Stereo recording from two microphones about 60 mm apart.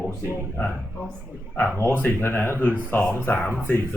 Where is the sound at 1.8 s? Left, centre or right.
Left.